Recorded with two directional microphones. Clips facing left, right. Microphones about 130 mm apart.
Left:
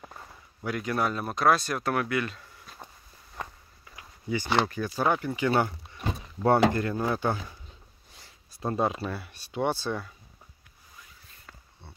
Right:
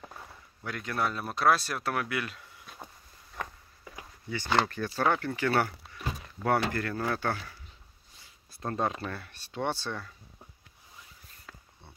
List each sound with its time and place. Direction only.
0.0 s a sound: centre (ahead or behind)
0.7 s speech: 5° left (ahead or behind)
4.3 s speech: 10° left (ahead or behind)
8.5 s speech: 10° left (ahead or behind)